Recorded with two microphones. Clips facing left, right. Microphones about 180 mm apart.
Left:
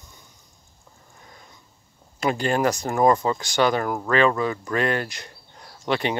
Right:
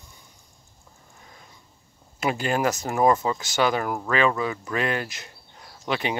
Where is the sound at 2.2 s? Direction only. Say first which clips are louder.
Left 2 dB; 5° right (ahead or behind).